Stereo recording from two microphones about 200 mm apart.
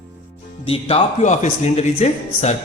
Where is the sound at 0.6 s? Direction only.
30° left (ahead or behind).